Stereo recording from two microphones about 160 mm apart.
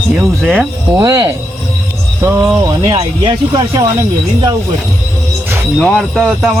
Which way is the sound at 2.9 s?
30° right (ahead or behind).